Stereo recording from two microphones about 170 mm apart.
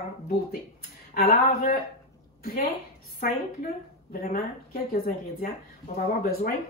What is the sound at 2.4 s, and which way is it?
Speech, 65° left (ahead or behind).